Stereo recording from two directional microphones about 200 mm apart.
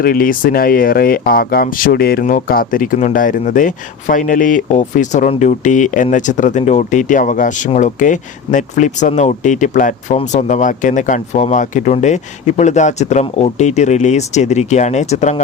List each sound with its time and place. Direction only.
0.0 s speech: 45° left (ahead or behind)